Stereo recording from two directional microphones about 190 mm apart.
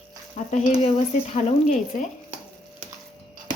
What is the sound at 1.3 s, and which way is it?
Speech, 40° left (ahead or behind).